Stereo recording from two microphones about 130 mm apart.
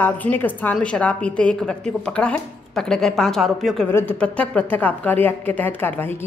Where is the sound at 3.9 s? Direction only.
15° left (ahead or behind).